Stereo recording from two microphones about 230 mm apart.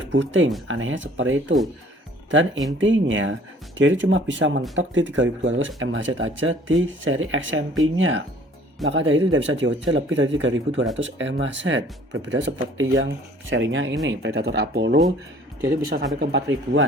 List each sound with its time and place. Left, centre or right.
0.1 s speech: right
16.2 s speech: right